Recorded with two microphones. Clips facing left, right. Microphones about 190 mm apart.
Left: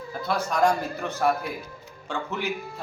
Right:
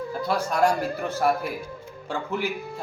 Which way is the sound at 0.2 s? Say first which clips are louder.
Right 1 dB; 10° right (ahead or behind).